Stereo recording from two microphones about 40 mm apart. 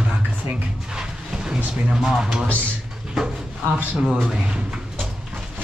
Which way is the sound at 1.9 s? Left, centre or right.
Centre.